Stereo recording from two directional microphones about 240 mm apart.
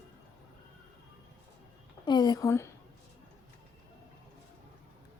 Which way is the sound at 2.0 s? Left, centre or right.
Centre.